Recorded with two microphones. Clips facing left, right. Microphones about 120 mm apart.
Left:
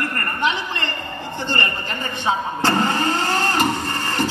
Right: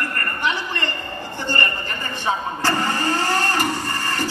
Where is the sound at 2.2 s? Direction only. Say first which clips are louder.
Left 2 dB; 20° left (ahead or behind).